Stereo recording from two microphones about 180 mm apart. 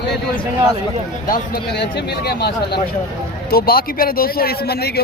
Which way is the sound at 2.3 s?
65° left (ahead or behind).